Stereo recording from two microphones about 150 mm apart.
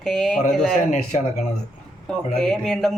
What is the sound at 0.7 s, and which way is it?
Speech, 55° left (ahead or behind).